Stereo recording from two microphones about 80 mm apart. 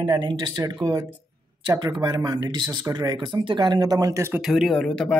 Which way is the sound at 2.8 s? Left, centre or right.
Right.